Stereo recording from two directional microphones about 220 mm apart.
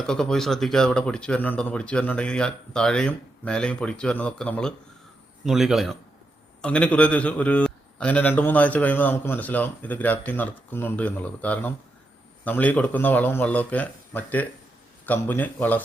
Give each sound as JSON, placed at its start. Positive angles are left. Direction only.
{"t": 0.0, "sound": "a man's voice", "side_deg": 5}